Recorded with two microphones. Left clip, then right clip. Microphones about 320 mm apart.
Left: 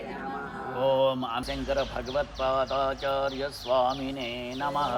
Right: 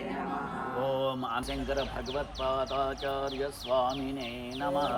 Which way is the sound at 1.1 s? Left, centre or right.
Left.